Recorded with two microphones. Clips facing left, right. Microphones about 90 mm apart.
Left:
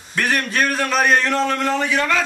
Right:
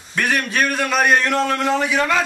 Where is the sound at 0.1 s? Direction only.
Centre (ahead or behind).